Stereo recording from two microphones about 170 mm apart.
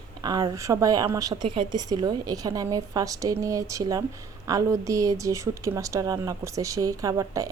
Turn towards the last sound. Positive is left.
turn(degrees=-20)  # may be behind; listen again after turning